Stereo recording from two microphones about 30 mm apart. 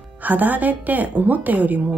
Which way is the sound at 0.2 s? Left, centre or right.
Right.